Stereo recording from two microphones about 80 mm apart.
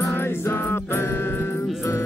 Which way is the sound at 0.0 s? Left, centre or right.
Left.